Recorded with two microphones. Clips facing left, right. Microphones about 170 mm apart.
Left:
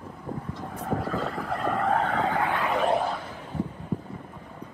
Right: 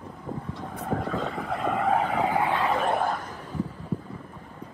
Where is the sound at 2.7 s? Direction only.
50° right (ahead or behind).